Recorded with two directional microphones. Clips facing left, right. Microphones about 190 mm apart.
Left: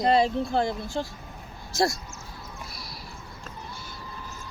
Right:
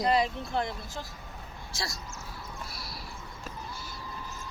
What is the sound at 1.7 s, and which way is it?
Speech, 45° left (ahead or behind).